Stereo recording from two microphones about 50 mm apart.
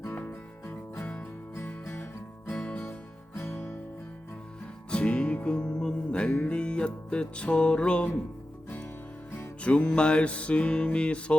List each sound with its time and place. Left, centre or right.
0.1 s music: left
1.5 s music: left
2.6 s music: left
3.3 s music: left
4.9 s music: left
9.6 s music: left